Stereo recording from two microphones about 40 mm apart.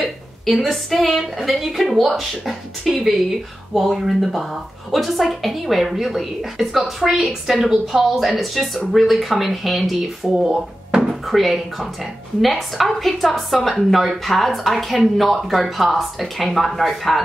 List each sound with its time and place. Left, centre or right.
0.0 s a woman's voice: centre
10.2 s speech: centre
11.2 s a woman's voice: centre